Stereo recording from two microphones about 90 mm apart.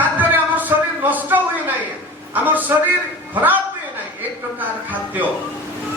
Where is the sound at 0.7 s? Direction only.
35° right (ahead or behind).